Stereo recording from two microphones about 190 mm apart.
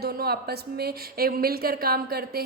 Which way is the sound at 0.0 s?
55° right (ahead or behind).